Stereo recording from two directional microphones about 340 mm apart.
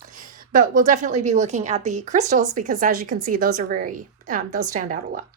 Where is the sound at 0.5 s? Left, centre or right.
Right.